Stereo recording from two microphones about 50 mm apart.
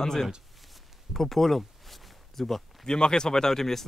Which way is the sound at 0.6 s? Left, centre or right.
Centre.